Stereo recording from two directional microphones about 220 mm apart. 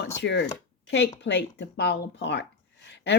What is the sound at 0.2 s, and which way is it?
A woman's voice, 50° left (ahead or behind).